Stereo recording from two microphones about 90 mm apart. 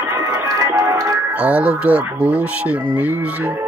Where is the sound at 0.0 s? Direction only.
40° right (ahead or behind).